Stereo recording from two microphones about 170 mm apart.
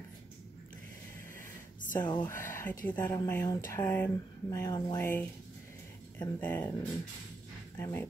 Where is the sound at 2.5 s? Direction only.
10° left (ahead or behind).